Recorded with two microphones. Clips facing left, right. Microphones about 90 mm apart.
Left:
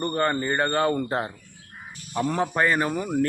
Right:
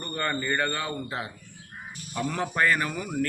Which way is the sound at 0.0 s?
35° left (ahead or behind).